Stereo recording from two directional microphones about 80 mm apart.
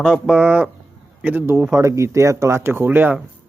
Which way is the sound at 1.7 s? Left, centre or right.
Right.